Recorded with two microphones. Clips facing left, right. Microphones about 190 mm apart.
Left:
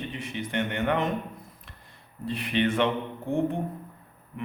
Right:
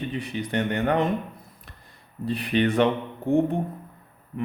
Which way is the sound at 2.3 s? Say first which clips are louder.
Right 3 dB; 35° right (ahead or behind).